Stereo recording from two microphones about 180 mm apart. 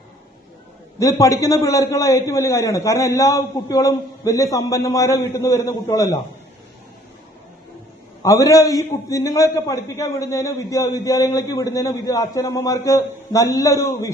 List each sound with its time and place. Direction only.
0.9 s a man's voice: 20° left (ahead or behind)
8.2 s a man's voice: 20° left (ahead or behind)